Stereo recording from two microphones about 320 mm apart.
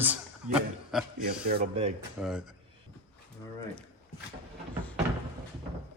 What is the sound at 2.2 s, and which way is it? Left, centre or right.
Speech, centre.